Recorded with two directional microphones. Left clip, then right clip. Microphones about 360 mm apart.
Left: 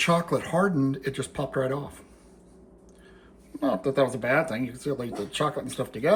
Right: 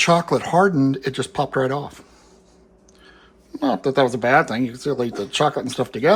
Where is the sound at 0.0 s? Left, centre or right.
Centre.